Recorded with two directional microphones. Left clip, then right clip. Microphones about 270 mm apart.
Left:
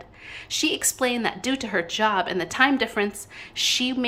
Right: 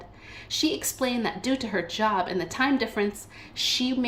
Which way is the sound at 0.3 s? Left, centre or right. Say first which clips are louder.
Left 2 dB; centre.